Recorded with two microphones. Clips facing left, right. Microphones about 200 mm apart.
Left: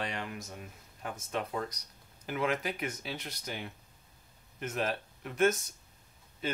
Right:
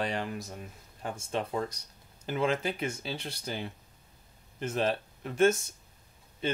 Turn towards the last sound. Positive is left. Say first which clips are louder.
# right 4 dB
turn(degrees=-25)  # may be behind; listen again after turning